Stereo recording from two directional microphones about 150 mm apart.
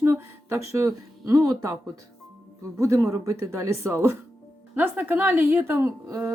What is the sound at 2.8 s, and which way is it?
Speech, 20° right (ahead or behind).